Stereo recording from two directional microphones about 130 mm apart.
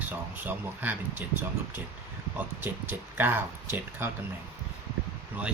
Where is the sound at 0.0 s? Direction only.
15° right (ahead or behind).